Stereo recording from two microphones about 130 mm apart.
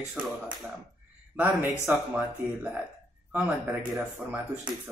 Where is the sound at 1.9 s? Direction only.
15° right (ahead or behind).